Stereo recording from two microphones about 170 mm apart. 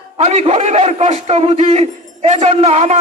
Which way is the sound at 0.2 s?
40° right (ahead or behind).